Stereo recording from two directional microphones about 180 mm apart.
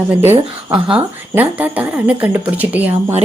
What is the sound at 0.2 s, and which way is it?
A woman's voice, 10° right (ahead or behind).